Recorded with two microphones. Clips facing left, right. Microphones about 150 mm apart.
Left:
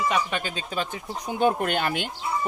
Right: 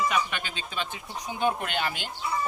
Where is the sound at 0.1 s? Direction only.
35° left (ahead or behind).